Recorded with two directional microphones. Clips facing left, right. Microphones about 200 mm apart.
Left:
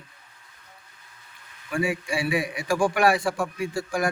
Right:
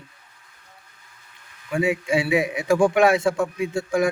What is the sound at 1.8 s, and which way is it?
A man's voice, 20° right (ahead or behind).